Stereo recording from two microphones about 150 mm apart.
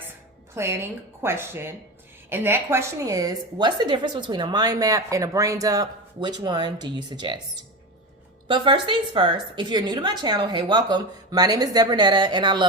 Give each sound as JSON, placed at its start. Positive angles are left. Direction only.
{"t": 0.5, "sound": "a woman's voice", "side_deg": -20}
{"t": 8.4, "sound": "a woman's voice", "side_deg": -35}